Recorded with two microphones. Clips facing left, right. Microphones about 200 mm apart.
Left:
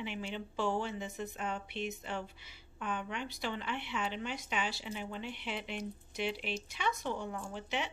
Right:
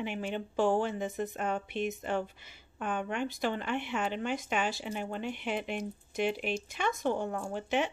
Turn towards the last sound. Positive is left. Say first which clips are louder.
# right 7 dB
turn(degrees=-45)  # may be behind; listen again after turning